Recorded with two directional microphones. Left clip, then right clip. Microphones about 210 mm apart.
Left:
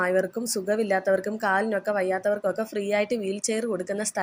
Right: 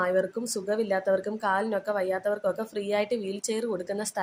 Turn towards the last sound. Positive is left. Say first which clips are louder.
# left 2 dB
turn(degrees=10)  # may be behind; listen again after turning